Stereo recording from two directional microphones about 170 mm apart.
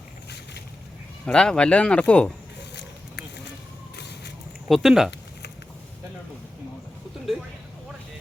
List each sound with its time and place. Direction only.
1.2 s speech: 5° left (ahead or behind)
3.9 s a sound: 80° left
4.7 s speech: centre (ahead or behind)